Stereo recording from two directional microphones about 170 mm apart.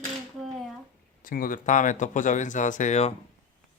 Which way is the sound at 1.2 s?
55° left (ahead or behind).